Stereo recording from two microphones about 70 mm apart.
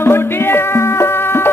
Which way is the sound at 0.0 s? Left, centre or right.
Left.